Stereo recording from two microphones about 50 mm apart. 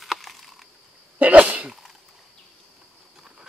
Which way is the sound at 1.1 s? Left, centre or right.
Right.